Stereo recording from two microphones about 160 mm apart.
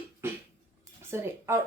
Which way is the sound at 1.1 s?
15° right (ahead or behind).